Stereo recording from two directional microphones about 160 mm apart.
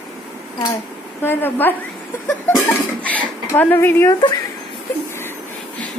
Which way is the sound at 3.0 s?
10° left (ahead or behind).